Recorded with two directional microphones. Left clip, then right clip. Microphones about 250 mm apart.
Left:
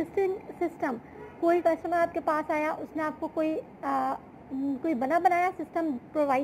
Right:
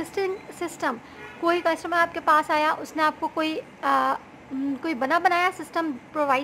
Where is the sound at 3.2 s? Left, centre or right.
Right.